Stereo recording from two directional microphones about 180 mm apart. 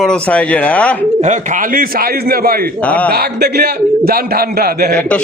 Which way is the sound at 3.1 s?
60° right (ahead or behind).